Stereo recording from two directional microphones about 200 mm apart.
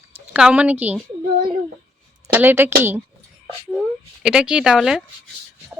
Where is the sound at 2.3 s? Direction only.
10° right (ahead or behind).